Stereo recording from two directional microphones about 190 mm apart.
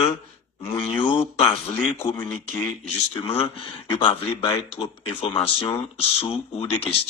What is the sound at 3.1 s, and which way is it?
Speech, 30° left (ahead or behind).